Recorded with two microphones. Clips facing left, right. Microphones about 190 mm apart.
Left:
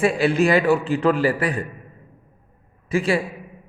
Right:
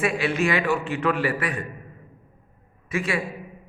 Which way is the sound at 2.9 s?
30° left (ahead or behind).